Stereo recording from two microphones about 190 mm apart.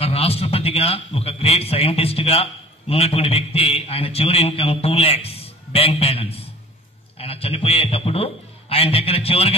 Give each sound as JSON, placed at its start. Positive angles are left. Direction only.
{"t": 0.0, "sound": "a man's voice", "side_deg": 30}